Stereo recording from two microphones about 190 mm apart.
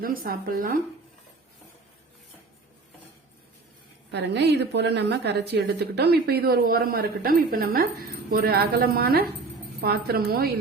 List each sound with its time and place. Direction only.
0.0 s a woman's voice: 50° right (ahead or behind)
4.1 s a woman's voice: 65° right (ahead or behind)